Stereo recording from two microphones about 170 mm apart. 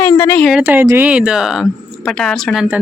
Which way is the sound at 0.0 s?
15° left (ahead or behind).